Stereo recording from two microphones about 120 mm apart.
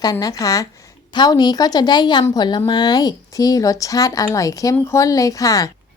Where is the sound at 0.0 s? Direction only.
35° left (ahead or behind).